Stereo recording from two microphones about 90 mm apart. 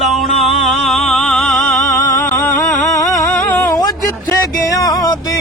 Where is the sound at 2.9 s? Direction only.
35° left (ahead or behind).